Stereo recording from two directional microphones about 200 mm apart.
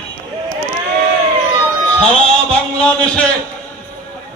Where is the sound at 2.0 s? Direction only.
5° left (ahead or behind).